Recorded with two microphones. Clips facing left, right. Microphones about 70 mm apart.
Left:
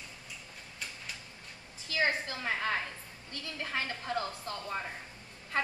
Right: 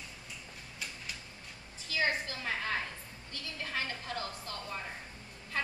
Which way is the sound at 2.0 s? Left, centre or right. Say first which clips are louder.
Left 2 dB; left.